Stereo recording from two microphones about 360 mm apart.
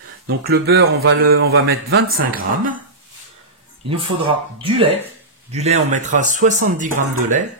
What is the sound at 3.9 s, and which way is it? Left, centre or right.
Speech, centre.